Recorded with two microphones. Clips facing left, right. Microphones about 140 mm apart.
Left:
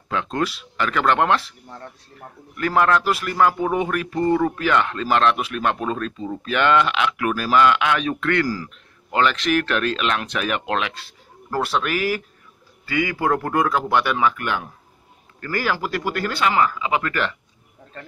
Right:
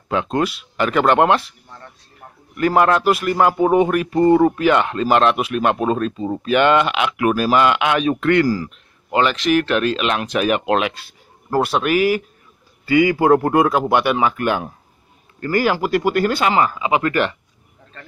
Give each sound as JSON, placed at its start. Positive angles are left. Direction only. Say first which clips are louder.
{"t": 0.1, "sound": "speech", "louder": "right 4 dB", "side_deg": -15}
{"t": 2.5, "sound": "speech", "louder": "right 3 dB", "side_deg": -20}